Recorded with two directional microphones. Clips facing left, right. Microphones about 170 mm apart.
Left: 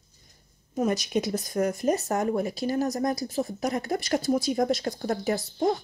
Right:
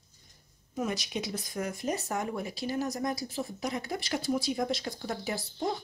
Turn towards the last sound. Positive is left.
turn(degrees=45)  # may be behind; listen again after turning